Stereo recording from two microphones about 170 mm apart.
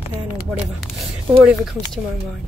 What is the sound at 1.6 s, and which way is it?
Speech, centre (ahead or behind).